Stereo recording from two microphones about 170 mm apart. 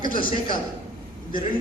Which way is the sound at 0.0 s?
55° left (ahead or behind).